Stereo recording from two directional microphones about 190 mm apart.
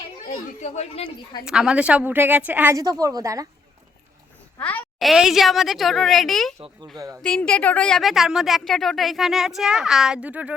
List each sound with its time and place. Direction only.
0.3 s speech: 35° left (ahead or behind)
1.5 s a woman's voice: 5° right (ahead or behind)
4.6 s a woman's voice: 10° left (ahead or behind)
6.6 s speech: 20° right (ahead or behind)
7.2 s a woman's voice: 5° left (ahead or behind)